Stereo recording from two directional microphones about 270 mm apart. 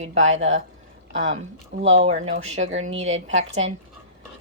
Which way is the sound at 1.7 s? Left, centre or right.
Right.